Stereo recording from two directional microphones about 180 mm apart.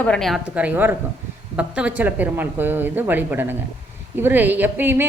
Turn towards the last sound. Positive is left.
turn(degrees=-10)  # may be behind; listen again after turning